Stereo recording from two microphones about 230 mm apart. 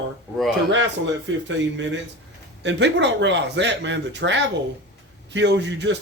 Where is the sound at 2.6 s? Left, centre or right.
Right.